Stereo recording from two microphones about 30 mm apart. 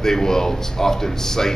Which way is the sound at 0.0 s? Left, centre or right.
Centre.